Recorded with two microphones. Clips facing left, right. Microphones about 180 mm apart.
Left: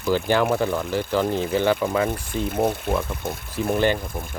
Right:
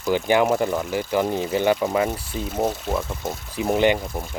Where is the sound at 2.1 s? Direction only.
5° right (ahead or behind).